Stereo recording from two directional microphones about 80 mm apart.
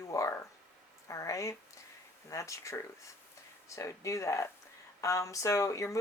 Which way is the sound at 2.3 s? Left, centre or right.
Left.